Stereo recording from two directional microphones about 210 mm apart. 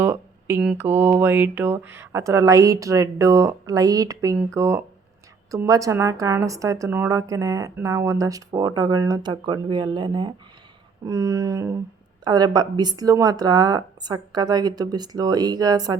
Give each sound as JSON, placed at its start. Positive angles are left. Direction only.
{"t": 0.0, "sound": "a woman's voice", "side_deg": -10}